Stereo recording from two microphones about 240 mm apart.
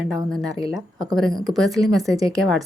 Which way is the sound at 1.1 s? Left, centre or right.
Centre.